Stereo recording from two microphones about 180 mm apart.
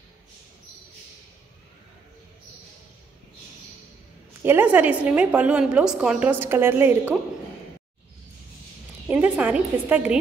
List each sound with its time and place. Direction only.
4.4 s a woman's voice: 10° right (ahead or behind)
9.1 s a woman's voice: 10° right (ahead or behind)